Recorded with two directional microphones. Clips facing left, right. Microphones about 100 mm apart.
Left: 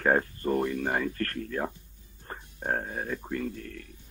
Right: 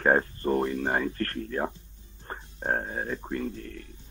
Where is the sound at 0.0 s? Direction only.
30° right (ahead or behind).